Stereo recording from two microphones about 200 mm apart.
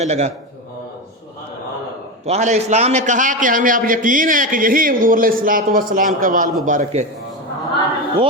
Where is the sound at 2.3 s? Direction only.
35° right (ahead or behind).